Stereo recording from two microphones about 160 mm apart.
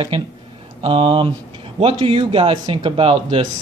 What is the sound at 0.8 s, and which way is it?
Speech, 35° right (ahead or behind).